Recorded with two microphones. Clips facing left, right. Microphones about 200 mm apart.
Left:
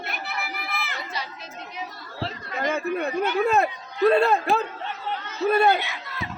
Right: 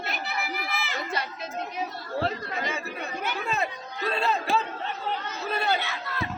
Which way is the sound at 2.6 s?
55° left (ahead or behind).